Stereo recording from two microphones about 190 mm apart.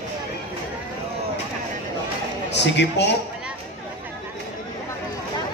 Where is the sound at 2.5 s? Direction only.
65° left (ahead or behind).